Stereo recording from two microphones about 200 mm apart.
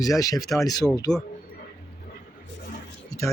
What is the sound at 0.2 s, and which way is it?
Speech, 15° left (ahead or behind).